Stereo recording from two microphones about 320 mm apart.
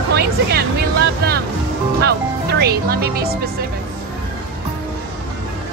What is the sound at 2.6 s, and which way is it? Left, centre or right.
Speech, right.